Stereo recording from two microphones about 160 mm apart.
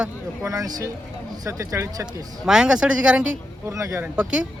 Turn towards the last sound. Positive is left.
turn(degrees=-5)  # may be behind; listen again after turning